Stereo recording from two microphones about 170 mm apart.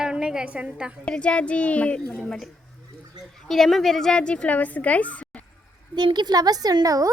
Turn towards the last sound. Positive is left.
turn(degrees=-20)  # may be behind; listen again after turning